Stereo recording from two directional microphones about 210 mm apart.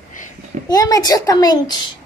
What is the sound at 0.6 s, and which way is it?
A woman's voice, 15° left (ahead or behind).